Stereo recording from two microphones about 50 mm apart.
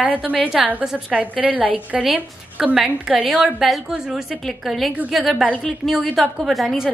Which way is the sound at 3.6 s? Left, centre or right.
Centre.